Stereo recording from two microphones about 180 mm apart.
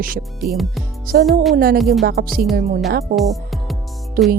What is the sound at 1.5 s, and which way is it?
Speech, 55° right (ahead or behind).